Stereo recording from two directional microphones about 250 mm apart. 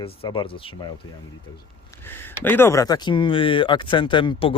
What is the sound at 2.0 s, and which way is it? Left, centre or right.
Speech, centre.